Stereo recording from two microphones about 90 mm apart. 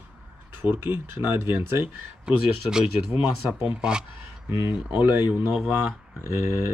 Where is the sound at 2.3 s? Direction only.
10° right (ahead or behind).